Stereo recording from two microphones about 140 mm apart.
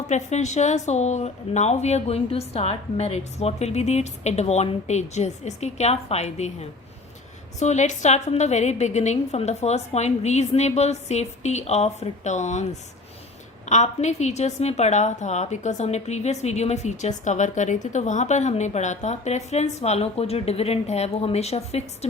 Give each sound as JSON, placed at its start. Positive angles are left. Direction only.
{"t": 0.1, "sound": "a woman's voice", "side_deg": 55}
{"t": 13.7, "sound": "a woman's voice", "side_deg": 55}